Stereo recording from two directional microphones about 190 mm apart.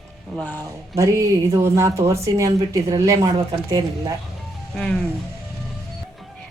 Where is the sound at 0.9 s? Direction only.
15° right (ahead or behind).